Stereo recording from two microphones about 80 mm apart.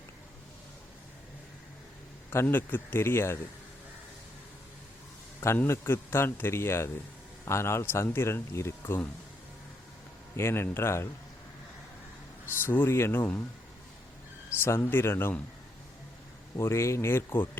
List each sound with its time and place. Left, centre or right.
2.3 s speech: left
5.6 s speech: left
10.3 s speech: left
12.6 s speech: left
14.6 s speech: left
16.6 s speech: left